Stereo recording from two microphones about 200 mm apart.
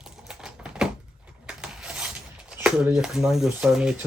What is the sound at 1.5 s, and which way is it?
Rub, 5° right (ahead or behind).